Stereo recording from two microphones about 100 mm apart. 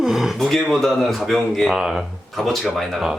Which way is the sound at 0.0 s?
5° right (ahead or behind).